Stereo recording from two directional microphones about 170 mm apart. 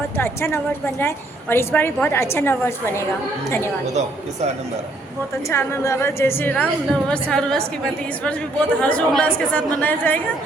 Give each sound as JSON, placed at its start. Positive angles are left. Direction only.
{"t": 0.2, "sound": "a woman's voice", "side_deg": 15}
{"t": 3.9, "sound": "speech", "side_deg": -40}
{"t": 5.5, "sound": "a woman's voice", "side_deg": 15}